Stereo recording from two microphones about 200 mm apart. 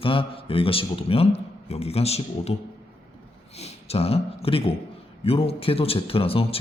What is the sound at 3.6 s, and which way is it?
Speech, 30° left (ahead or behind).